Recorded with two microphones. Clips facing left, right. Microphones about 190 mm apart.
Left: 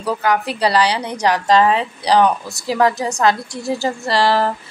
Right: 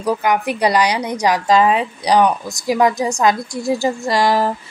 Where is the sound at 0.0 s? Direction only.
15° right (ahead or behind).